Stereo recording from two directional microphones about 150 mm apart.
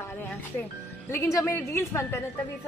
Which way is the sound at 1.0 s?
20° left (ahead or behind).